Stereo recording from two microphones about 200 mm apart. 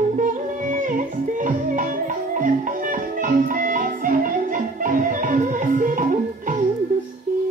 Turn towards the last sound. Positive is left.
turn(degrees=-40)  # may be behind; listen again after turning